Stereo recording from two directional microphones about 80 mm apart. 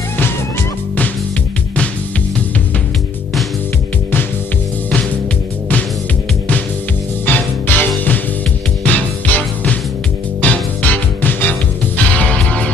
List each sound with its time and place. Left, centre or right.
7.2 s music: left